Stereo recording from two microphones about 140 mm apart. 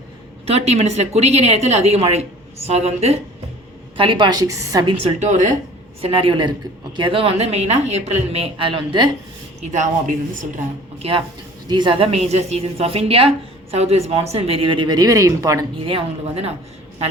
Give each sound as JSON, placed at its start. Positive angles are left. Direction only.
{"t": 0.4, "sound": "a woman's voice", "side_deg": -50}
{"t": 3.9, "sound": "a woman's voice", "side_deg": -40}
{"t": 5.0, "sound": "speech", "side_deg": -60}
{"t": 6.0, "sound": "a woman's voice", "side_deg": -40}
{"t": 9.6, "sound": "speech", "side_deg": -60}
{"t": 11.0, "sound": "a woman's voice", "side_deg": -45}
{"t": 11.7, "sound": "a woman's voice", "side_deg": -35}
{"t": 15.8, "sound": "a woman's voice", "side_deg": -40}